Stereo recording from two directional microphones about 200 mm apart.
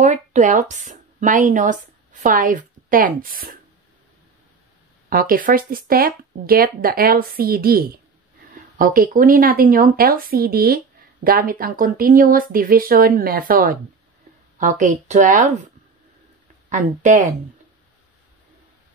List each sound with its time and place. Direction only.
0.0 s a woman's voice: 35° right (ahead or behind)
5.1 s speech: 45° right (ahead or behind)
16.6 s speech: 40° right (ahead or behind)